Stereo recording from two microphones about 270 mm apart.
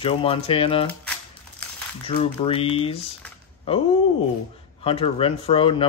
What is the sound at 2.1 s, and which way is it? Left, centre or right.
Speech, left.